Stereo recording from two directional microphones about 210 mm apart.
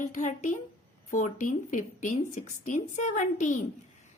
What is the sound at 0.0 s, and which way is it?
A woman's voice, 35° left (ahead or behind).